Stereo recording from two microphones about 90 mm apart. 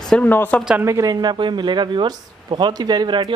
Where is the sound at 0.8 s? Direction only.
40° right (ahead or behind).